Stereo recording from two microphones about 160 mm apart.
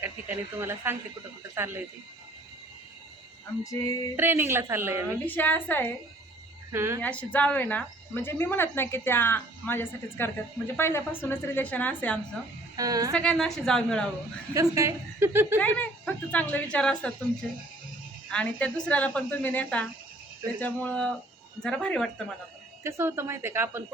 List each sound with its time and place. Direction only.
0.0 s a woman's voice: 15° right (ahead or behind)
3.6 s music: 20° left (ahead or behind)
4.2 s a woman's voice: 15° right (ahead or behind)
5.2 s speech: 10° left (ahead or behind)
6.7 s a woman's voice: 15° right (ahead or behind)
7.0 s speech: 10° left (ahead or behind)
12.7 s a woman's voice: 25° right (ahead or behind)
13.1 s a woman's voice: 5° left (ahead or behind)
14.5 s a woman's voice: 20° right (ahead or behind)
15.5 s speech: 10° left (ahead or behind)
18.3 s a woman's voice: 5° left (ahead or behind)
22.8 s a woman's voice: 15° right (ahead or behind)